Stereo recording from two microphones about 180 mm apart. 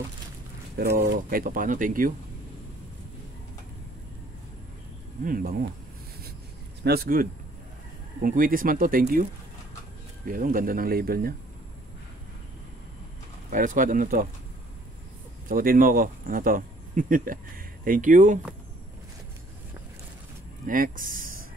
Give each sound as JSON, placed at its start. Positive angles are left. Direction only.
{"t": 0.7, "sound": "speech", "side_deg": -55}
{"t": 5.2, "sound": "speech", "side_deg": -50}
{"t": 6.8, "sound": "speech", "side_deg": -60}
{"t": 10.2, "sound": "speech", "side_deg": -50}
{"t": 13.5, "sound": "speech", "side_deg": -45}
{"t": 15.4, "sound": "speech", "side_deg": -55}
{"t": 20.6, "sound": "speech", "side_deg": -50}